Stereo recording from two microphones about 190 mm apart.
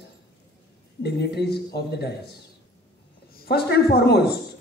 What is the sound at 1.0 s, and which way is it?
A man's voice, 60° left (ahead or behind).